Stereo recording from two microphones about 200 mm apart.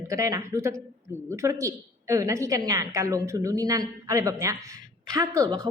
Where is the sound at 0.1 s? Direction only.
15° right (ahead or behind).